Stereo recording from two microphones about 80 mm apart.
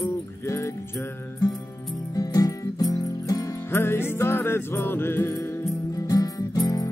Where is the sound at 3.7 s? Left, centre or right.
Left.